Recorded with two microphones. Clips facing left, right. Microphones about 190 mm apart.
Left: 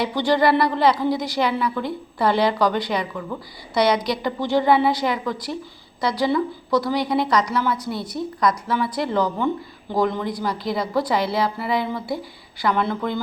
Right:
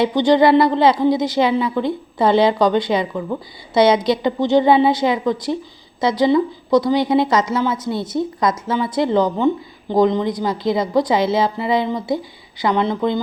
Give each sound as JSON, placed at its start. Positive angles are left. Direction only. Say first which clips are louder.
{"t": 0.0, "sound": "a woman's voice", "louder": "right 5 dB", "side_deg": -20}